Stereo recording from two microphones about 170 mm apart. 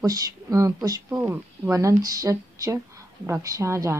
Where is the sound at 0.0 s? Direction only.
20° right (ahead or behind).